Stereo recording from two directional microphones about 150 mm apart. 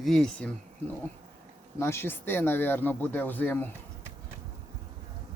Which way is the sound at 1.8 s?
15° left (ahead or behind).